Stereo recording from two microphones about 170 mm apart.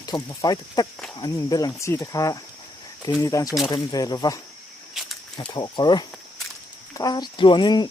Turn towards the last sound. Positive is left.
turn(degrees=25)  # may be behind; listen again after turning